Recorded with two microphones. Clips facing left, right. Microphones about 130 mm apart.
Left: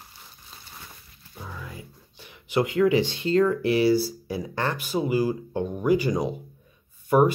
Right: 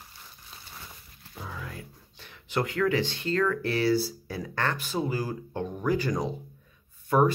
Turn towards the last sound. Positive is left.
turn(degrees=10)  # may be behind; listen again after turning